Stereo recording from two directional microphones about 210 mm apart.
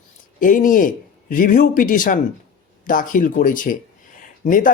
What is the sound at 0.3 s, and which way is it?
Speech, 40° left (ahead or behind).